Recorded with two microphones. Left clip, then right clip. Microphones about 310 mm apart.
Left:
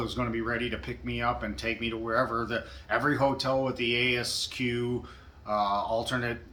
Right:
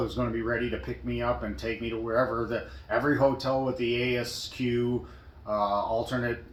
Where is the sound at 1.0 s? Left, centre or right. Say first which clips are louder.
Even; centre.